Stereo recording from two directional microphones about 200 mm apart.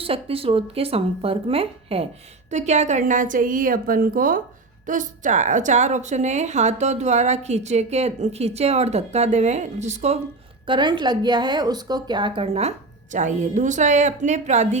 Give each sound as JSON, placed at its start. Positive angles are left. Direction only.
{"t": 0.0, "sound": "a woman's voice", "side_deg": -30}
{"t": 10.7, "sound": "a woman's voice", "side_deg": -25}